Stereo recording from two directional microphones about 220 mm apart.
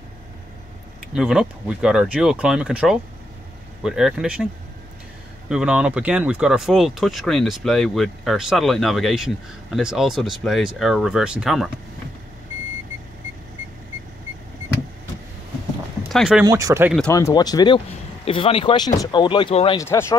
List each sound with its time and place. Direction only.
1.1 s speech: 5° right (ahead or behind)
5.5 s speech: 5° right (ahead or behind)
16.1 s speech: centre (ahead or behind)
16.4 s speech: 15° right (ahead or behind)
17.1 s speech: 15° left (ahead or behind)
19.8 s speech: 10° left (ahead or behind)